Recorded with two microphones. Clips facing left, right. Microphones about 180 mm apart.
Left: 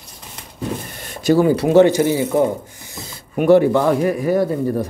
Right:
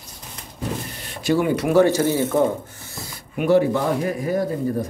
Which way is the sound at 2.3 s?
15° left (ahead or behind).